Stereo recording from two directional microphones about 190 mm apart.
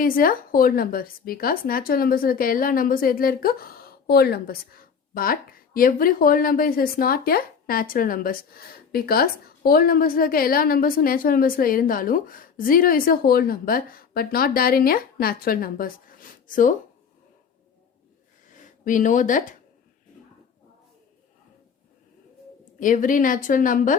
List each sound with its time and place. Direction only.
0.0 s speech: 50° left (ahead or behind)
18.5 s speech: 45° left (ahead or behind)
22.8 s speech: 45° left (ahead or behind)